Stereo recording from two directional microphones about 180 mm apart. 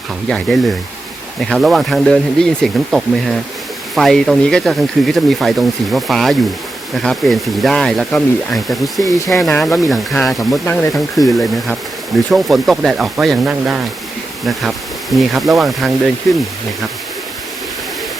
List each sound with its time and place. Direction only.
0.3 s speech: centre (ahead or behind)
9.0 s speech: 20° left (ahead or behind)
9.3 s speech: centre (ahead or behind)
10.5 s speech: 15° left (ahead or behind)
12.3 s speech: centre (ahead or behind)
15.1 s speech: centre (ahead or behind)